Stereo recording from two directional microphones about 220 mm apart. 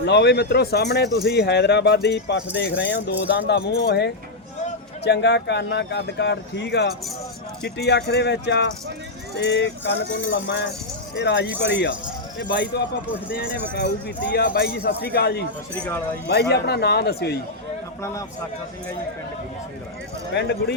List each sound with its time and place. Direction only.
0.0 s speech: 50° left (ahead or behind)
14.3 s speech: 45° left (ahead or behind)
18.0 s a man's voice: 15° left (ahead or behind)
20.3 s speech: 50° left (ahead or behind)